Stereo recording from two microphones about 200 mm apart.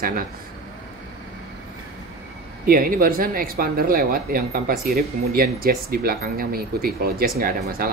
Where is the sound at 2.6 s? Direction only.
45° right (ahead or behind).